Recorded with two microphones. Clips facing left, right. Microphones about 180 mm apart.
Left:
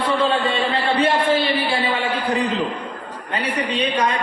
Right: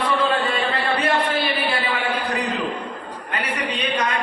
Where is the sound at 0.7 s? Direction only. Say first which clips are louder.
Left 4 dB; 30° left (ahead or behind).